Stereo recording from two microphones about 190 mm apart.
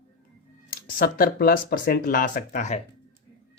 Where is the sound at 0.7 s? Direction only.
50° left (ahead or behind).